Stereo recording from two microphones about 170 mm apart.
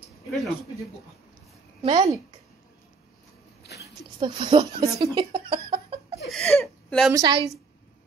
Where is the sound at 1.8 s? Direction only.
25° right (ahead or behind).